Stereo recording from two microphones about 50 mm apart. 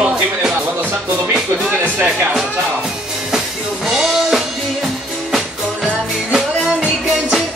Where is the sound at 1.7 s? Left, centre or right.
Right.